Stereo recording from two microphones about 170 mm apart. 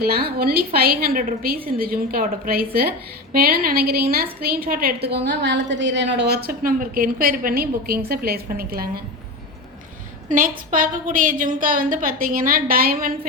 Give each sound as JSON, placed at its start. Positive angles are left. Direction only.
{"t": 0.0, "sound": "a woman's voice", "side_deg": -65}
{"t": 5.0, "sound": "a woman's voice", "side_deg": -85}
{"t": 10.7, "sound": "a woman's voice", "side_deg": -50}